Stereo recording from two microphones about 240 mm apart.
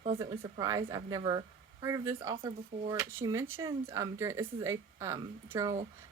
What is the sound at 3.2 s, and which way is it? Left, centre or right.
Speech, centre.